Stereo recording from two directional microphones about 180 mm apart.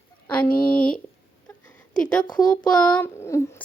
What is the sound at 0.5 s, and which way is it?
Speech, 55° left (ahead or behind).